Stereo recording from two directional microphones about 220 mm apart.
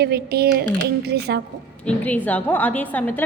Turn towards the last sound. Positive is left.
turn(degrees=10)  # may be behind; listen again after turning